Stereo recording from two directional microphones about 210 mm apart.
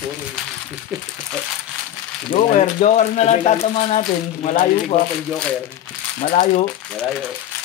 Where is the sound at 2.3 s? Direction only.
35° left (ahead or behind).